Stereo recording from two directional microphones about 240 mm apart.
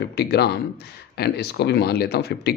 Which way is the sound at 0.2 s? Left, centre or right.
Left.